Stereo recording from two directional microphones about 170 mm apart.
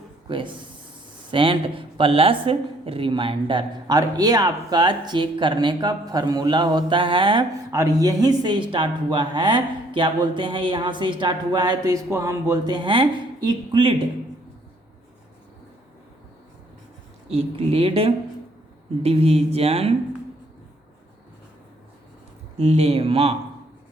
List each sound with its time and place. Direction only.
0.3 s speech: 30° right (ahead or behind)
7.7 s speech: 20° right (ahead or behind)
17.2 s speech: 35° right (ahead or behind)
22.5 s speech: 40° right (ahead or behind)